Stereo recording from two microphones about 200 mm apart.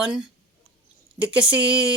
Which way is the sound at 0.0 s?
5° right (ahead or behind).